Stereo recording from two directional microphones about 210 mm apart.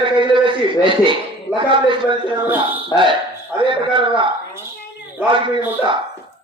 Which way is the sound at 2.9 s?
15° left (ahead or behind).